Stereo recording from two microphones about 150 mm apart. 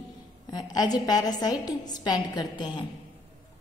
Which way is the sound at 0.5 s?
25° left (ahead or behind).